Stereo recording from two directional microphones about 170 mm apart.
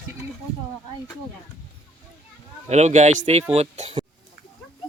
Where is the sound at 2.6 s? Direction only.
40° right (ahead or behind).